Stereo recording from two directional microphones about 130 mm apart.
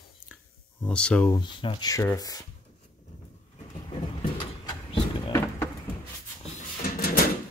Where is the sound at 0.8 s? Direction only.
10° left (ahead or behind).